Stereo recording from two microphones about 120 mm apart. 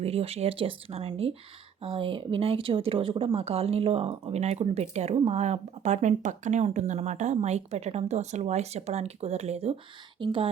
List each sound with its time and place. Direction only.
0.0 s speech: 60° right (ahead or behind)
10.2 s speech: 45° right (ahead or behind)